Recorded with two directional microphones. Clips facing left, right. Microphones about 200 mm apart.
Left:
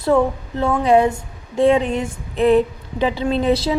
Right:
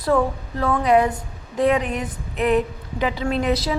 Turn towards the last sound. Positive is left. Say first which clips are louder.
# left 4 dB
turn(degrees=30)  # may be behind; listen again after turning